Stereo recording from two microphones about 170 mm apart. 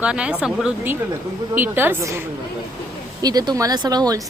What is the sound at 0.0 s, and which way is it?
A woman's voice, 5° right (ahead or behind).